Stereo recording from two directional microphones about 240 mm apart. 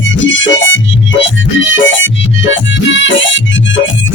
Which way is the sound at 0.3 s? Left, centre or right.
Left.